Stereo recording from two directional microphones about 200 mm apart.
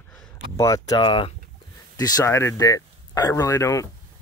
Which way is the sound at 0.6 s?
15° left (ahead or behind).